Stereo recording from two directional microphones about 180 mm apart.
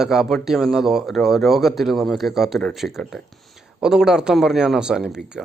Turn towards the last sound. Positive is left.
turn(degrees=-5)  # may be behind; listen again after turning